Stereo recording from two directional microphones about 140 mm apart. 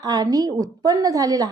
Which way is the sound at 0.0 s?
25° right (ahead or behind).